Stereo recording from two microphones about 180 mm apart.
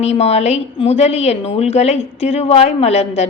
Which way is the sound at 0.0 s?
35° left (ahead or behind).